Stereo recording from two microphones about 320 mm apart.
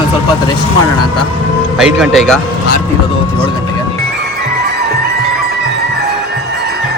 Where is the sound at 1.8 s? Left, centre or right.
Centre.